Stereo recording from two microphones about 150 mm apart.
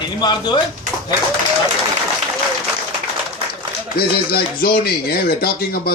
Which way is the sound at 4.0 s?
90° left.